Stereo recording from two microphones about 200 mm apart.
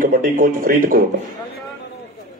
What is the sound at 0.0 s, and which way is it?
Speech, 40° right (ahead or behind).